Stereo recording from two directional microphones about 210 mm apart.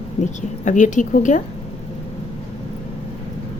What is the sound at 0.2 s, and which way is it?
A woman's voice, 35° left (ahead or behind).